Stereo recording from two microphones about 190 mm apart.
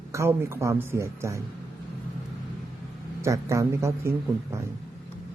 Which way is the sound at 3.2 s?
15° right (ahead or behind).